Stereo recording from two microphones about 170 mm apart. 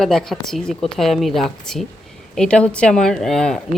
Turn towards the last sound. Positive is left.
turn(degrees=5)  # may be behind; listen again after turning